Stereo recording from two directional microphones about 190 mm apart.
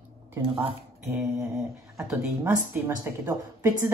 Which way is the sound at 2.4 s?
15° right (ahead or behind).